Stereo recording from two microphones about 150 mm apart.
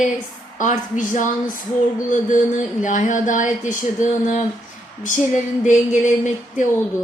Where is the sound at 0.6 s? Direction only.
55° left (ahead or behind).